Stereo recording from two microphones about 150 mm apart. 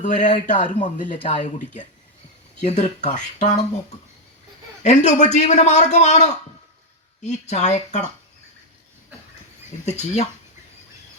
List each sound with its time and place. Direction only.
0.0 s a man's voice: 55° left (ahead or behind)
4.8 s a man's voice: 50° left (ahead or behind)
9.8 s a man's voice: 50° left (ahead or behind)